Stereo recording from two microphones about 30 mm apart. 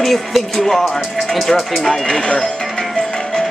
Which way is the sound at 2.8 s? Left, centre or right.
Centre.